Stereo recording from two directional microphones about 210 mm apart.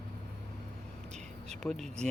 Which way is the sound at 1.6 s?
Centre (ahead or behind).